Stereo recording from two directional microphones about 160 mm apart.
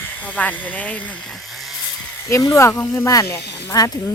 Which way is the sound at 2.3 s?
20° left (ahead or behind).